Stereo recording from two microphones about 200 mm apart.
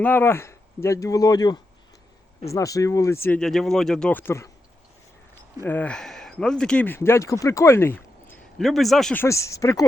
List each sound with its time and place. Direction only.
0.0 s speech: 10° left (ahead or behind)
3.2 s speech: 5° left (ahead or behind)
5.6 s speech: 10° left (ahead or behind)
9.2 s speech: 15° left (ahead or behind)